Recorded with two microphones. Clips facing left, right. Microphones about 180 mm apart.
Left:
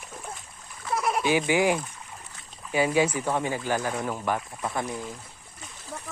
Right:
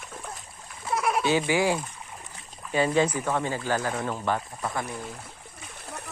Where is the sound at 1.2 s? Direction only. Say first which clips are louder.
Left 2 dB; 15° left (ahead or behind).